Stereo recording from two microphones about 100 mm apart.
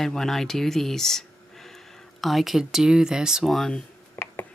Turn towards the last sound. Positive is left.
turn(degrees=25)  # may be behind; listen again after turning